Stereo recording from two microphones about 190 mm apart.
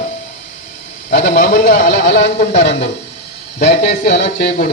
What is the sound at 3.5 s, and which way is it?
Speech, 40° left (ahead or behind).